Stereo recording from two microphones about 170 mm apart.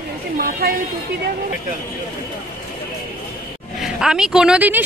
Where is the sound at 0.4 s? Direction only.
65° right (ahead or behind).